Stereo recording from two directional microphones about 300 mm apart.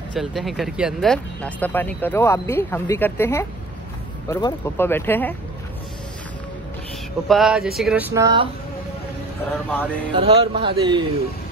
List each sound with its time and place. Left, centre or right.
0.1 s speech: centre
7.2 s speech: centre
9.7 s speech: centre
10.1 s speech: centre